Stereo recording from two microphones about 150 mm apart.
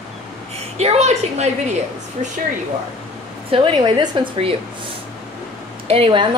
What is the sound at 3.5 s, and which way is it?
A woman's voice, 35° right (ahead or behind).